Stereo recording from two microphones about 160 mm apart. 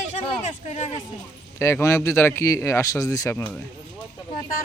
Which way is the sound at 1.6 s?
20° left (ahead or behind).